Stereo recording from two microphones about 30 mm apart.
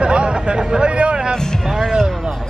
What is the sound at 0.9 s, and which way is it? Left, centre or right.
Vehicle, right.